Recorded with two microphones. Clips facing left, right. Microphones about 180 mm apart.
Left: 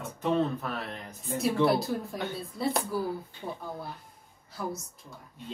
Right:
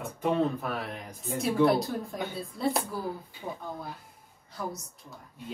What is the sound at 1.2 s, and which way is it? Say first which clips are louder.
Speech: right 1 dB; centre (ahead or behind).